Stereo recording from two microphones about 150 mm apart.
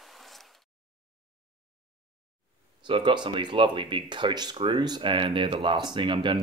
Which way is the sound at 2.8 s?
30° right (ahead or behind).